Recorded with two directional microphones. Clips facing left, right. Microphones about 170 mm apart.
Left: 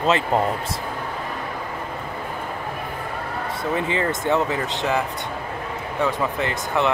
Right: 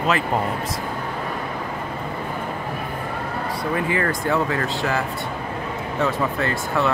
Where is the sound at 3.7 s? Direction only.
20° left (ahead or behind).